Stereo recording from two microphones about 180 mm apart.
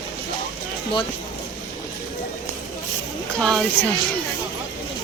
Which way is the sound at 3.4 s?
Centre (ahead or behind).